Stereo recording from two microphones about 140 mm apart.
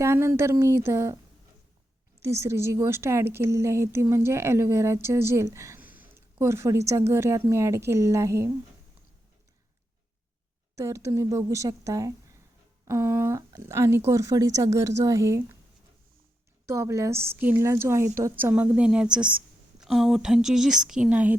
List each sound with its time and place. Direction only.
0.0 s a woman's voice: 20° right (ahead or behind)
2.2 s a woman's voice: 20° right (ahead or behind)
10.8 s a woman's voice: 20° right (ahead or behind)
16.6 s a woman's voice: 20° right (ahead or behind)